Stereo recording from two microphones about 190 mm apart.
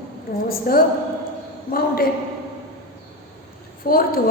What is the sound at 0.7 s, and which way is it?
Speech, 50° left (ahead or behind).